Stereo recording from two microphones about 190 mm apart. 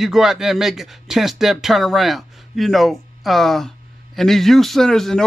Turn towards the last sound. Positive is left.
turn(degrees=0)  # may be behind; listen again after turning